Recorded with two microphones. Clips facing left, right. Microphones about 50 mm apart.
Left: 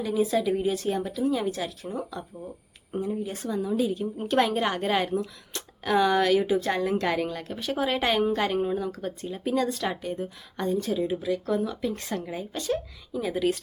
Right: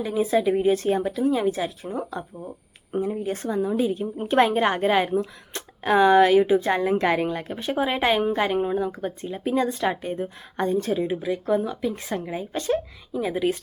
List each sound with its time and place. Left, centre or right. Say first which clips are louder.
0.0 s a woman's voice: right 3 dB; right
11.8 s speech: right 3 dB; centre
12.5 s a woman's voice: right 4 dB; right
13.1 s a woman's voice: right 2 dB; centre